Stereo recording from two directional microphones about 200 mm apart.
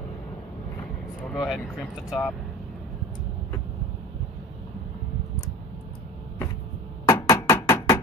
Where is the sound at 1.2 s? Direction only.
Centre (ahead or behind).